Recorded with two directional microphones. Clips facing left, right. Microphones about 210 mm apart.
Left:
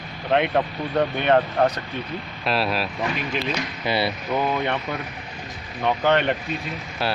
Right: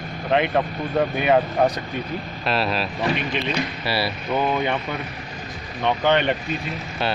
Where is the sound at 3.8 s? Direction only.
20° left (ahead or behind).